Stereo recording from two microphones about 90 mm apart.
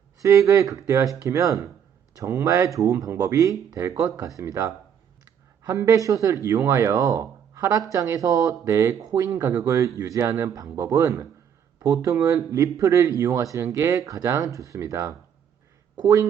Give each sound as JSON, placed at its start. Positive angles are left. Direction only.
{"t": 0.2, "sound": "speech", "side_deg": -35}
{"t": 9.4, "sound": "speech", "side_deg": -30}